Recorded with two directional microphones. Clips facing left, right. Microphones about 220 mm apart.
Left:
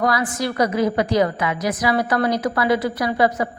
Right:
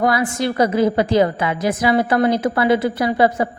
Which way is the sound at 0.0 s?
25° right (ahead or behind).